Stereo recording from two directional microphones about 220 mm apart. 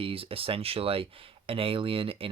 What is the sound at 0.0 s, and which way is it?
Speech, 25° right (ahead or behind).